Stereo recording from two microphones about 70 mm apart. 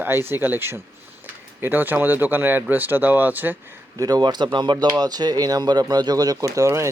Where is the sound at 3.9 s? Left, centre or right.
Right.